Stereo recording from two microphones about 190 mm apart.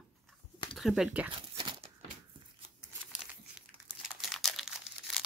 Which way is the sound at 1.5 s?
25° right (ahead or behind).